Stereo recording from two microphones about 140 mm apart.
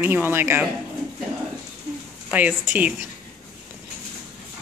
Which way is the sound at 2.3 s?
10° right (ahead or behind).